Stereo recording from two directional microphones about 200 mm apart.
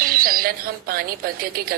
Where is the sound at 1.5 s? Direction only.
45° right (ahead or behind).